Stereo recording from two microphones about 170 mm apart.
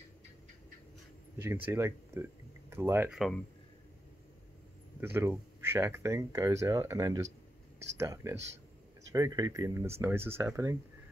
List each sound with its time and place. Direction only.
1.4 s speech: 15° right (ahead or behind)
3.1 s speech: centre (ahead or behind)
5.0 s speech: 10° right (ahead or behind)